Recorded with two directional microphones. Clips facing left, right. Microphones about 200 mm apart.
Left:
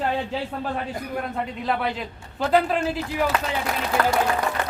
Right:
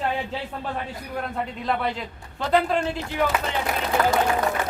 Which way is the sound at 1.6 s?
Centre (ahead or behind).